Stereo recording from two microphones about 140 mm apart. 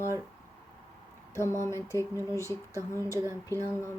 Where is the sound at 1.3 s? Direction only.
20° left (ahead or behind).